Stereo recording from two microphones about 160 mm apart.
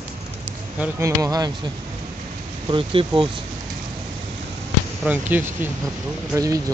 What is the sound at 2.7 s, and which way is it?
Speech, 30° right (ahead or behind).